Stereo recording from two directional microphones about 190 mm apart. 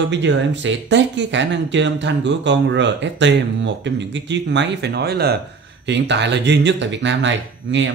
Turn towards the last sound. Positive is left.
turn(degrees=-75)  # may be behind; listen again after turning